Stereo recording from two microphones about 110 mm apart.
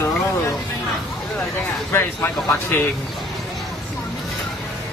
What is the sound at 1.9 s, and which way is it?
Speech, 20° left (ahead or behind).